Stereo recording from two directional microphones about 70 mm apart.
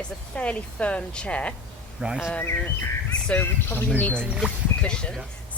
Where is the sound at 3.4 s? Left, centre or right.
Left.